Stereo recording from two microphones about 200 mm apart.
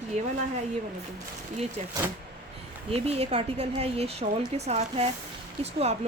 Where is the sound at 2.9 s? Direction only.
30° right (ahead or behind).